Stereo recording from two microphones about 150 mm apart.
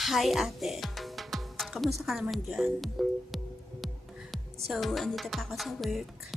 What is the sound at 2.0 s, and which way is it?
Speech, centre (ahead or behind).